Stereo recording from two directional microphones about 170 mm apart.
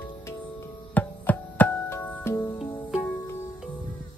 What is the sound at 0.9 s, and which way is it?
Music, 10° left (ahead or behind).